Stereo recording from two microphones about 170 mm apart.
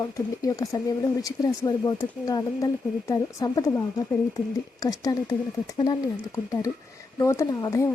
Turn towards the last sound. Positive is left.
turn(degrees=20)  # may be behind; listen again after turning